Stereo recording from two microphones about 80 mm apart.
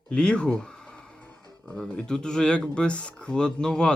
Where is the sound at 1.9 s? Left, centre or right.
Centre.